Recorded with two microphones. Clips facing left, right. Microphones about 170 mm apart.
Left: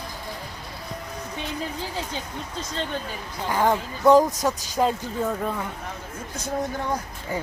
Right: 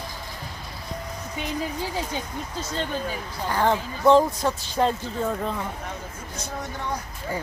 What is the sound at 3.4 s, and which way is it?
Speech, 20° left (ahead or behind).